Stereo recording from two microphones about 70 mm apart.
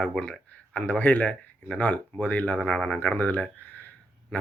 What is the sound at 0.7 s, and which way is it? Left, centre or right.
Speech, left.